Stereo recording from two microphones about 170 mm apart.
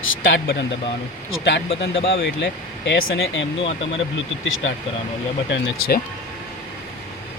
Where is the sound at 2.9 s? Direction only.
90° left.